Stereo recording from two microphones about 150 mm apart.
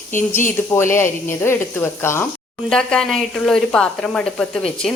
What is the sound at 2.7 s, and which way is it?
A woman's voice, 5° left (ahead or behind).